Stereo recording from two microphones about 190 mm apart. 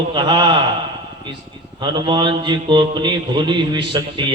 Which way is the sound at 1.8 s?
25° right (ahead or behind).